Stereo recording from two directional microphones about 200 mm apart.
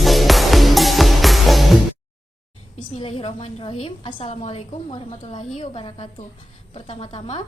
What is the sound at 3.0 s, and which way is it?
A woman's voice, 30° left (ahead or behind).